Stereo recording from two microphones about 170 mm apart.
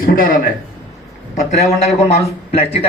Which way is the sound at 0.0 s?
55° left (ahead or behind).